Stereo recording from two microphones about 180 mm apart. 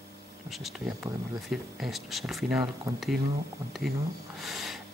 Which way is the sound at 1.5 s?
Centre (ahead or behind).